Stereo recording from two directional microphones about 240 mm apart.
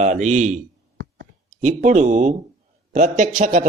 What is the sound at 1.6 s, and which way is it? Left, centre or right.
Speech, right.